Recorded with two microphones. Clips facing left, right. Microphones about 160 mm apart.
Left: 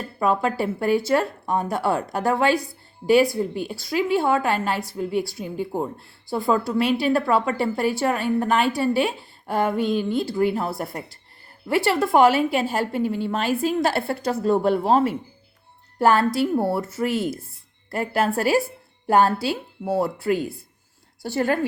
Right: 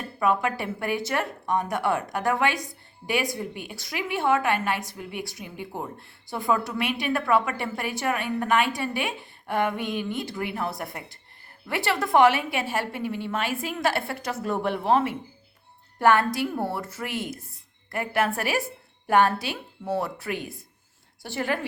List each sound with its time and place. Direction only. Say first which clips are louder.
0.2 s a woman's voice: left 3 dB; 30° left (ahead or behind)